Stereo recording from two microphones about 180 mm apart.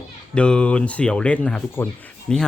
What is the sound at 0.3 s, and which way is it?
A man's voice, 5° left (ahead or behind).